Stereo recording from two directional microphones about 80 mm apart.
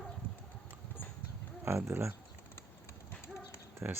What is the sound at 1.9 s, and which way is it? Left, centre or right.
Speech, right.